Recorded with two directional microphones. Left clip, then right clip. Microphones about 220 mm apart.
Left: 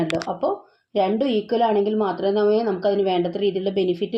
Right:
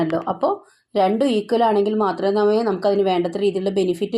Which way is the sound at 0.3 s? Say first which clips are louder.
Right 3 dB; 20° right (ahead or behind).